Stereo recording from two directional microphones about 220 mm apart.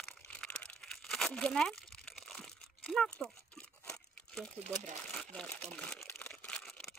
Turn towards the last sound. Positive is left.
turn(degrees=0)  # may be behind; listen again after turning